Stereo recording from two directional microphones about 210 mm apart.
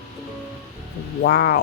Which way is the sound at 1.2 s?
55° left (ahead or behind).